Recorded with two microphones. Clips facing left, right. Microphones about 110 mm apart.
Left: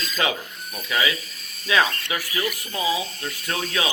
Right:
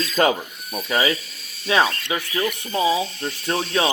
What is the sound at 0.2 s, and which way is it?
Speech, 45° right (ahead or behind).